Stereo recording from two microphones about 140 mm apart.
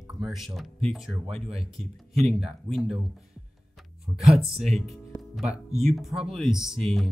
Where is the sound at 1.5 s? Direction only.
Centre (ahead or behind).